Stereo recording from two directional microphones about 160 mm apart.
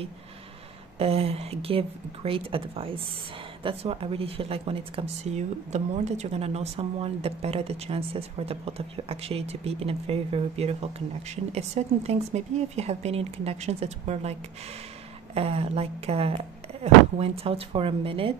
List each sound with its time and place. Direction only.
0.9 s speech: 40° right (ahead or behind)
15.3 s speech: 40° right (ahead or behind)